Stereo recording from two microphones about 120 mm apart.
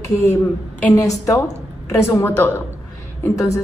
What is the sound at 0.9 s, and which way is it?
Speech, 25° left (ahead or behind).